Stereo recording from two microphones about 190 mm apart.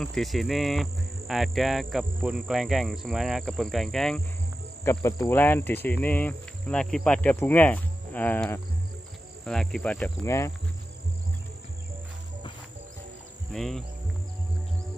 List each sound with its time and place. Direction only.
0.0 s speech: centre (ahead or behind)
4.8 s speech: 15° left (ahead or behind)
13.5 s speech: centre (ahead or behind)